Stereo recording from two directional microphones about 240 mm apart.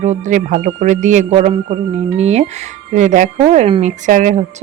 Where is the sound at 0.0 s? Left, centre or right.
Right.